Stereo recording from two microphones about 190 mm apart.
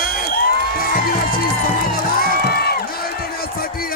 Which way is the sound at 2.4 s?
55° left (ahead or behind).